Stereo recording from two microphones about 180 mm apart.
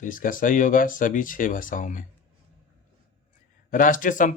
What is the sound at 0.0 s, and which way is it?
Speech, 50° left (ahead or behind).